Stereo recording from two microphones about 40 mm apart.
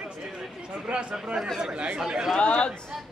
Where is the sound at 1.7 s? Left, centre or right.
Right.